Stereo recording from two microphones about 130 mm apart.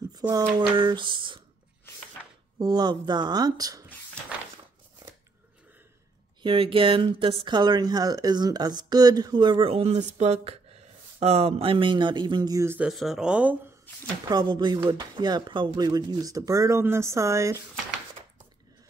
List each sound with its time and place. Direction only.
0.3 s speech: 35° right (ahead or behind)
2.6 s speech: 35° right (ahead or behind)
6.4 s speech: 40° right (ahead or behind)
12.6 s speech: 15° right (ahead or behind)
12.9 s speech: centre (ahead or behind)
14.3 s speech: 35° right (ahead or behind)